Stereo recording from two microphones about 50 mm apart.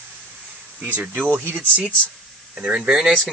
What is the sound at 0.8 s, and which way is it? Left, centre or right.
Speech, right.